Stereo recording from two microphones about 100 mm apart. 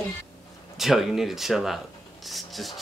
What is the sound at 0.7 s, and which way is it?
Speech, 5° right (ahead or behind).